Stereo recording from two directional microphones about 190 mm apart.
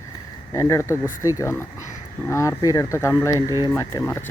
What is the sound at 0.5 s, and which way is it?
Speech, 15° left (ahead or behind).